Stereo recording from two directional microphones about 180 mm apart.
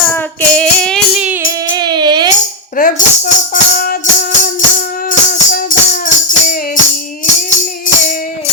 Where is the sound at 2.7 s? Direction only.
50° left (ahead or behind).